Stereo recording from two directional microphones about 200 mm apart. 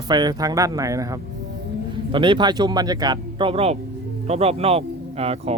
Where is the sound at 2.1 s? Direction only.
25° right (ahead or behind).